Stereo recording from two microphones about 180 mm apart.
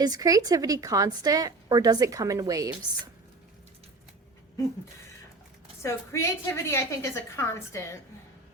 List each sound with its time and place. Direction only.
0.0 s speech: 20° right (ahead or behind)
5.8 s a woman's voice: 15° left (ahead or behind)